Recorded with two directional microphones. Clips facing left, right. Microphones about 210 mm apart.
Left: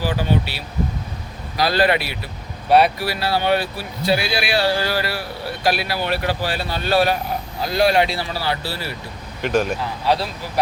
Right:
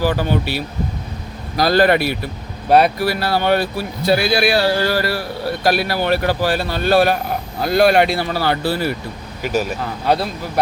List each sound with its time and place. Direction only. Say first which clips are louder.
0.0 s speech: right 3 dB; 45° right (ahead or behind)
9.4 s speech: left 1 dB; 5° right (ahead or behind)